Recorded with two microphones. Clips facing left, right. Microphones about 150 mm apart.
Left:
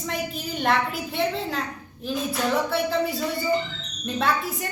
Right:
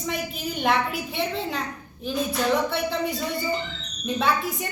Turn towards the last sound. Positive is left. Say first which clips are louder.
# even
turn(degrees=0)  # may be behind; listen again after turning